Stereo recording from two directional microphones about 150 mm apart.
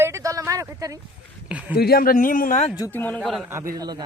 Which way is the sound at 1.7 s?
90° left.